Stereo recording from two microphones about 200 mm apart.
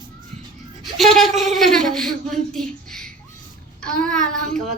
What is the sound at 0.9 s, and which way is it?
Speech, centre (ahead or behind).